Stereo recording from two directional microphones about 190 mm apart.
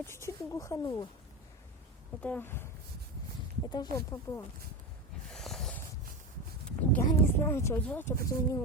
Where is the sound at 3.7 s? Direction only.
20° left (ahead or behind).